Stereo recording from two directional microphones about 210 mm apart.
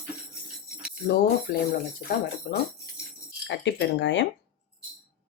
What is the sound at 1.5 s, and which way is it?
Speech, 45° left (ahead or behind).